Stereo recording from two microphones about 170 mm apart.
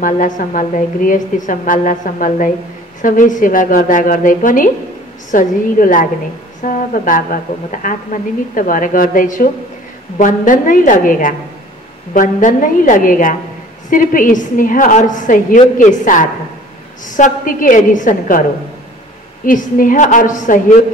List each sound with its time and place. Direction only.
0.0 s a woman's voice: 50° left (ahead or behind)
19.4 s a woman's voice: 55° left (ahead or behind)